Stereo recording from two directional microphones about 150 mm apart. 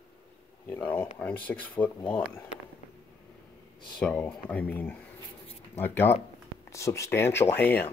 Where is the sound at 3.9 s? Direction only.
10° left (ahead or behind).